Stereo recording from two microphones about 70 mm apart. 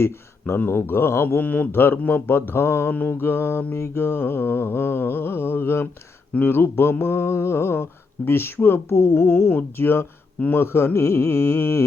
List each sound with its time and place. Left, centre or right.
0.0 s mantra: left
9.0 s mantra: left